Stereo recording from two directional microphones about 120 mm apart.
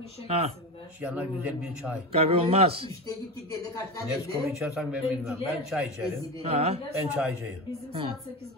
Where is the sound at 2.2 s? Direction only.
55° right (ahead or behind).